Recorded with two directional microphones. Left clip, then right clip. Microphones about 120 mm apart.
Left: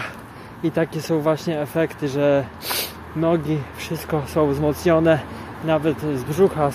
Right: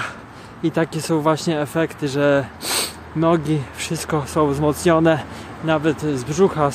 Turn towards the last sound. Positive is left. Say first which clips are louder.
# right 1 dB
turn(degrees=-45)  # may be behind; listen again after turning